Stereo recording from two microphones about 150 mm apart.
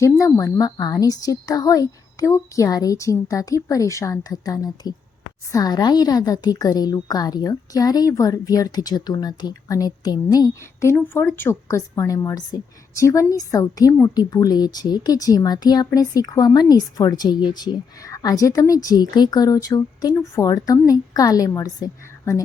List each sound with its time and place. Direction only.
0.0 s a woman's voice: 20° left (ahead or behind)